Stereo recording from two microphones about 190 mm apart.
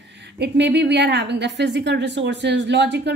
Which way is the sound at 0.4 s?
65° right (ahead or behind).